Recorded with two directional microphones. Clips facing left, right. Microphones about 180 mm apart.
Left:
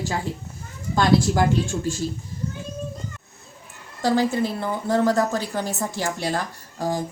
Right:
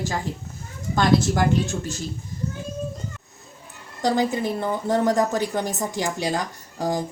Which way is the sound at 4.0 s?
15° right (ahead or behind).